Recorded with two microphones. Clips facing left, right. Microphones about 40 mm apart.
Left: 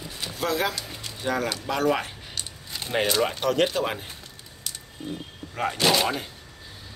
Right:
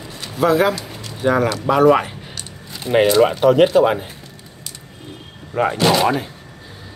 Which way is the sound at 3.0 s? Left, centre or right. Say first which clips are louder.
Right 10 dB; right.